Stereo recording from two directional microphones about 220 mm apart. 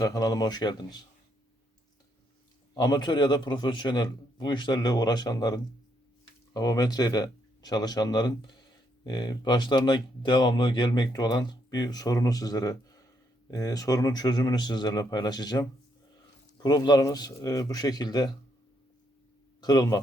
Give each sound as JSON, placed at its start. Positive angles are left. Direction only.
{"t": 0.0, "sound": "speech", "side_deg": 15}
{"t": 2.7, "sound": "speech", "side_deg": 20}
{"t": 16.6, "sound": "speech", "side_deg": 20}
{"t": 19.6, "sound": "speech", "side_deg": 15}